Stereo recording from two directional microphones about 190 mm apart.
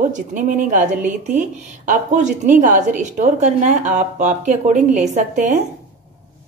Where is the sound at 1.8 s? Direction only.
40° right (ahead or behind).